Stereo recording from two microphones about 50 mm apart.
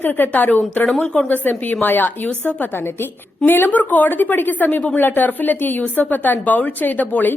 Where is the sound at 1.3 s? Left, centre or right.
Left.